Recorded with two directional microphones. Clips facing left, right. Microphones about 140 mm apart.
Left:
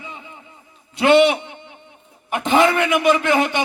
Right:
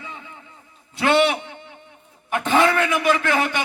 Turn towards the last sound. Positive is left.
turn(degrees=20)  # may be behind; listen again after turning